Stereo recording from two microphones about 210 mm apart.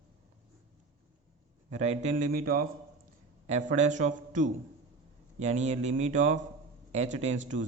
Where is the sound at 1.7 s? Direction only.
30° right (ahead or behind).